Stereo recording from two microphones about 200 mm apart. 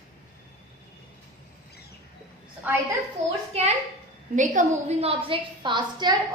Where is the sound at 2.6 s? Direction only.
10° right (ahead or behind).